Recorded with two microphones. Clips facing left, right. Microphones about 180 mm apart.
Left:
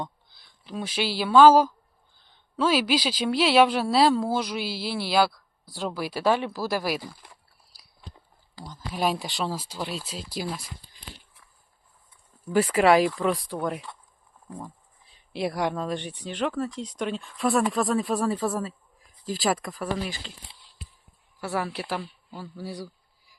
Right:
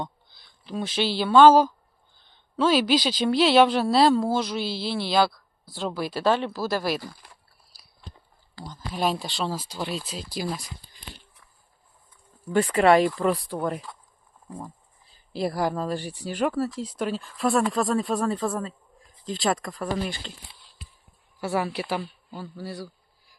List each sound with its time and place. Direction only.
0.0 s speech: 5° left (ahead or behind)
7.7 s biting: 15° left (ahead or behind)
8.5 s speech: 10° left (ahead or behind)
12.5 s speech: centre (ahead or behind)
15.1 s speech: centre (ahead or behind)
21.4 s speech: centre (ahead or behind)
22.5 s speech: 15° left (ahead or behind)